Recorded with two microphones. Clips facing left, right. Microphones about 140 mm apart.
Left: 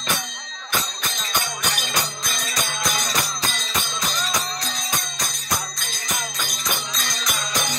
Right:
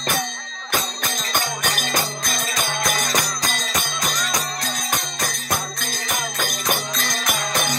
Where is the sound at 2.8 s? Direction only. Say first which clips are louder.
Right 4 dB; 45° right (ahead or behind).